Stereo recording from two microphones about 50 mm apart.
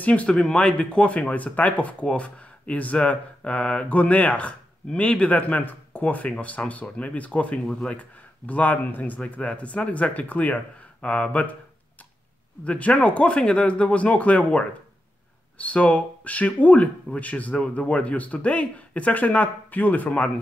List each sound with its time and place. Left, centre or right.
0.0 s speech: left
12.6 s speech: left